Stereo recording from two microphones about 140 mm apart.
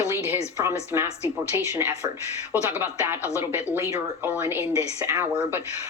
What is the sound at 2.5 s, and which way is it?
Speech, 15° right (ahead or behind).